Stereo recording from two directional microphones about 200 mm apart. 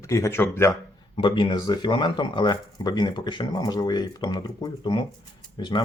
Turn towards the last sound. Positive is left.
turn(degrees=20)  # may be behind; listen again after turning